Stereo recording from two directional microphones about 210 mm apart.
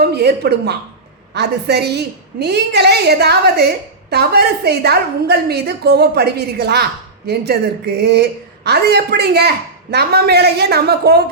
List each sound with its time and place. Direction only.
0.0 s a woman's voice: 50° right (ahead or behind)